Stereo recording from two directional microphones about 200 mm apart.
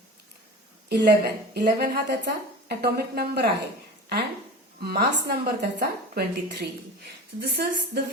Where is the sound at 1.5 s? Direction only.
50° right (ahead or behind).